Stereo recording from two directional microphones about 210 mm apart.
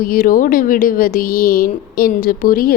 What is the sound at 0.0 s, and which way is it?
A woman's voice, 45° left (ahead or behind).